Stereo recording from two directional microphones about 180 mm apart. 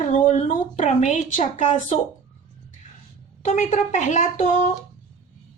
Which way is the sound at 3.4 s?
40° left (ahead or behind).